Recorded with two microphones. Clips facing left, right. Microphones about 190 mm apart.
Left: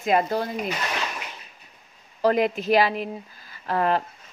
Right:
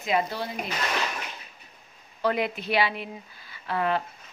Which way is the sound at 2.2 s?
40° left (ahead or behind).